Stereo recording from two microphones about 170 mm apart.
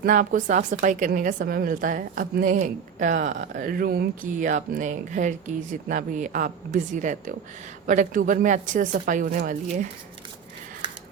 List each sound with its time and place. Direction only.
0.0 s a woman's voice: 50° right (ahead or behind)